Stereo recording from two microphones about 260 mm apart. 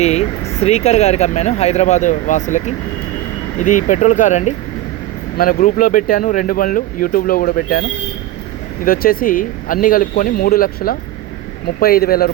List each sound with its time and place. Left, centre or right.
0.0 s speech: left